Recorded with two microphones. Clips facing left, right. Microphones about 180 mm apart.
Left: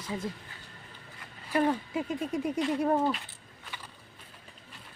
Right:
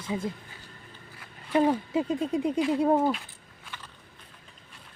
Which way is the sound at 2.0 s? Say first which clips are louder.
Right 4 dB; 25° right (ahead or behind).